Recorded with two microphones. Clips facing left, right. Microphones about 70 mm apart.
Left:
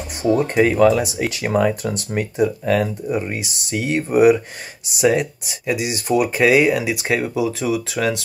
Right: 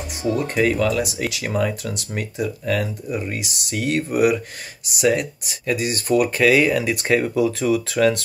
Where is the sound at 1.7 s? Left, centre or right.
Left.